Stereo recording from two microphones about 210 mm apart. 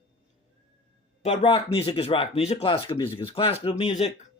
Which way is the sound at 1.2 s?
30° left (ahead or behind).